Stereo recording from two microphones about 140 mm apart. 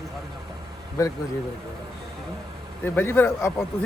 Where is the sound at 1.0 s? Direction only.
20° left (ahead or behind).